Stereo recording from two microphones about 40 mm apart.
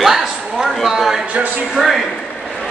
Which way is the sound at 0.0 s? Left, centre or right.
Centre.